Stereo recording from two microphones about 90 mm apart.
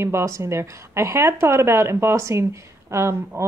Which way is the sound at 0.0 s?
35° right (ahead or behind).